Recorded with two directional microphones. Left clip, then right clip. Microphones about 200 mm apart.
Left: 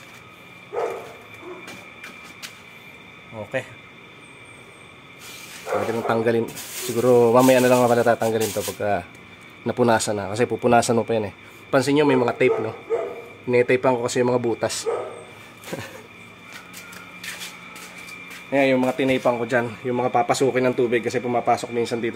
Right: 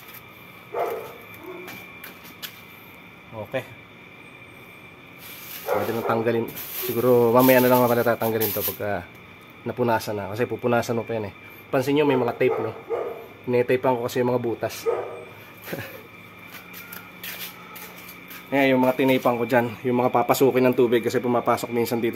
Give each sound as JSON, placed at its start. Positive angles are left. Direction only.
{"t": 5.9, "sound": "speech", "side_deg": 5}
{"t": 9.7, "sound": "speech", "side_deg": 25}
{"t": 15.7, "sound": "a sound", "side_deg": 5}
{"t": 18.5, "sound": "speech", "side_deg": -5}